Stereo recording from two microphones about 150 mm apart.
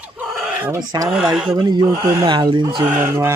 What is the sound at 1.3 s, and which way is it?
Speech, 5° right (ahead or behind).